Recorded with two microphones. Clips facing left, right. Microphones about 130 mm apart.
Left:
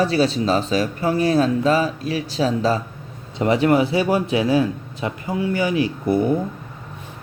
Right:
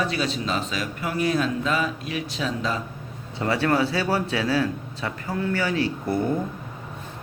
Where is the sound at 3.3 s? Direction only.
20° left (ahead or behind).